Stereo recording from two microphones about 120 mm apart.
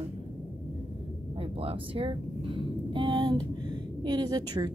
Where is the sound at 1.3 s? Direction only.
55° right (ahead or behind).